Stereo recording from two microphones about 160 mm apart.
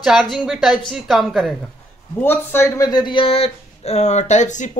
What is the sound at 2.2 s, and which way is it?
A man's voice, 15° left (ahead or behind).